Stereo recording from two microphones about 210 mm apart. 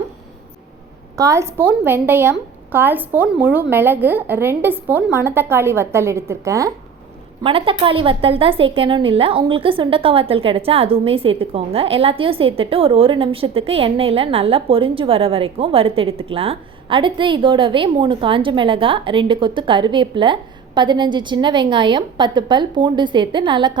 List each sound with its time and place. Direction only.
1.1 s a woman's voice: 15° right (ahead or behind)
7.4 s a woman's voice: 25° right (ahead or behind)